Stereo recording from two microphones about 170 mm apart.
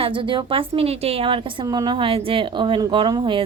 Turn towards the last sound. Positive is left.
turn(degrees=-30)  # may be behind; listen again after turning